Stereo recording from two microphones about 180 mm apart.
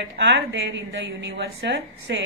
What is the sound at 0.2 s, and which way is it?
A woman's voice, 80° right.